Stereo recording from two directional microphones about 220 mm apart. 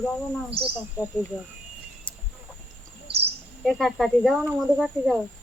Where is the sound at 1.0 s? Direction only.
5° right (ahead or behind).